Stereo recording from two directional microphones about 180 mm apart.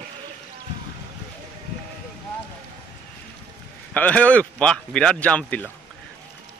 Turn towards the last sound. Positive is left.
turn(degrees=5)  # may be behind; listen again after turning